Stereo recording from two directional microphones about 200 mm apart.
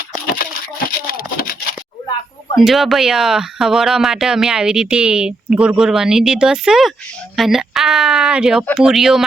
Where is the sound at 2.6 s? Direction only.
Centre (ahead or behind).